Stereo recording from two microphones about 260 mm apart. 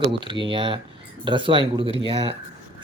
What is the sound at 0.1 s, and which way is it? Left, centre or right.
Speech, centre.